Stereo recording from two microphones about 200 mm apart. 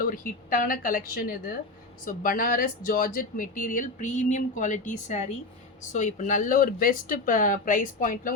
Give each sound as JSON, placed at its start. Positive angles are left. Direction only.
{"t": 0.0, "sound": "speech", "side_deg": 45}